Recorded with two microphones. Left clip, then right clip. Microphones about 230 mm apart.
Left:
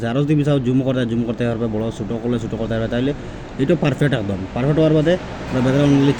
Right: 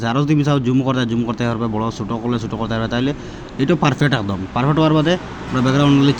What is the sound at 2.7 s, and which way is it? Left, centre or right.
Speech, centre.